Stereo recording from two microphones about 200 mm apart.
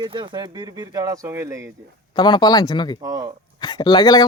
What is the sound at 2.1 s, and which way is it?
Speech, 20° left (ahead or behind).